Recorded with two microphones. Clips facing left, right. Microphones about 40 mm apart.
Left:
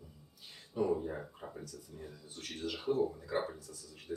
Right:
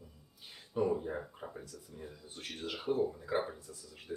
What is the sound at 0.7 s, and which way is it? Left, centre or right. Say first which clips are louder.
Speech: right 1 dB; centre.